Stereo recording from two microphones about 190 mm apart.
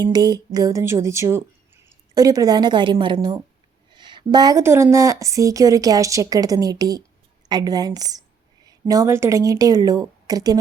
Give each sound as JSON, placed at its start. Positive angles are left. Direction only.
{"t": 0.0, "sound": "a woman's voice", "side_deg": -20}